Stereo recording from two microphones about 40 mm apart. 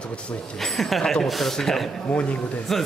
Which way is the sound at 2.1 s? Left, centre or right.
Left.